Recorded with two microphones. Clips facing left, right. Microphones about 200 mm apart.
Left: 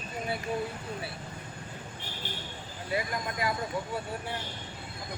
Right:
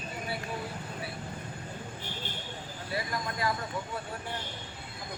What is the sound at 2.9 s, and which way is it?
Speech, 15° left (ahead or behind).